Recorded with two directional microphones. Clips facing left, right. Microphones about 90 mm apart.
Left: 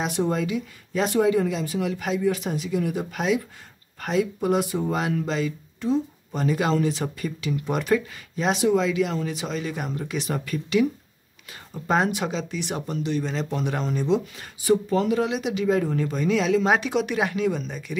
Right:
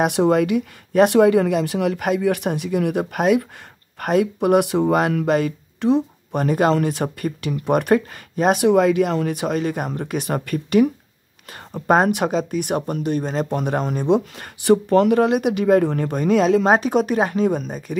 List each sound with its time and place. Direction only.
0.0 s speech: 65° right (ahead or behind); by 17.9 s 45° right (ahead or behind)